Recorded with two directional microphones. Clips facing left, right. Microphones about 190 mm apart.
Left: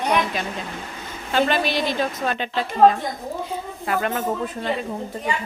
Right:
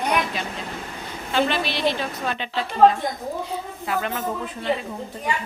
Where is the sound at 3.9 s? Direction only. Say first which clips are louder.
Left 3 dB; 50° left (ahead or behind).